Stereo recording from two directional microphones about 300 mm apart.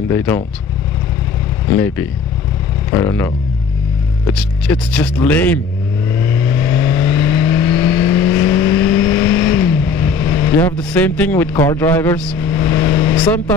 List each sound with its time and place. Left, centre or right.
0.1 s speech: centre
3.0 s speech: centre
6.1 s vehicle: centre